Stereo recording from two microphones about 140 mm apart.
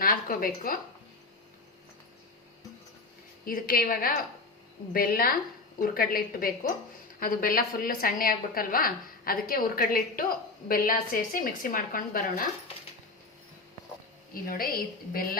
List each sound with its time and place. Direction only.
0.0 s a woman's voice: 85° left
3.4 s a woman's voice: 90° left
14.4 s a woman's voice: 90° left